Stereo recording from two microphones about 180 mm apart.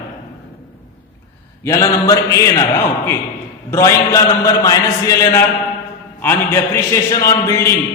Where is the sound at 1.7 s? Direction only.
20° left (ahead or behind).